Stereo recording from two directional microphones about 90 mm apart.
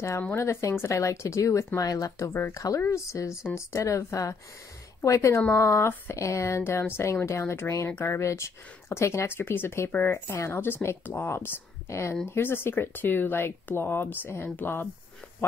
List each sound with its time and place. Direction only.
0.4 s speech: 30° left (ahead or behind)